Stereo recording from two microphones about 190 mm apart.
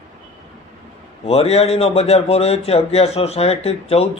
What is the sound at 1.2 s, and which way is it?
Speech, 30° left (ahead or behind).